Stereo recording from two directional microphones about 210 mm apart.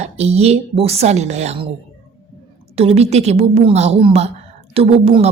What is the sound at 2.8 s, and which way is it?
A woman's voice, 30° right (ahead or behind).